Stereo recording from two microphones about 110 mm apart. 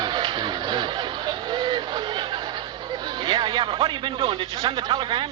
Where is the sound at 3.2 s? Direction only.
45° right (ahead or behind).